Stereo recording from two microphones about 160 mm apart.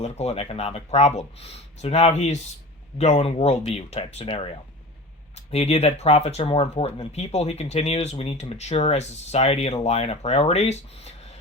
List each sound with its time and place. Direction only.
0.0 s speech: 40° left (ahead or behind)